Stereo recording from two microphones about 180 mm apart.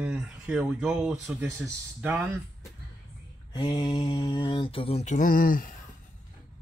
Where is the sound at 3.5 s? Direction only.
25° left (ahead or behind); by 5.7 s 50° left (ahead or behind).